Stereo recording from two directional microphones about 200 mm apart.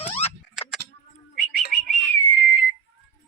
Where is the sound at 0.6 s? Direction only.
5° right (ahead or behind).